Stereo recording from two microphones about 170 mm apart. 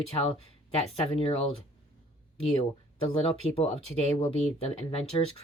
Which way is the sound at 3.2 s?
35° left (ahead or behind).